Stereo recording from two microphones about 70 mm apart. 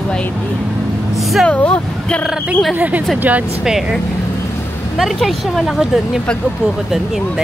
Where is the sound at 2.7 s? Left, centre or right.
Right.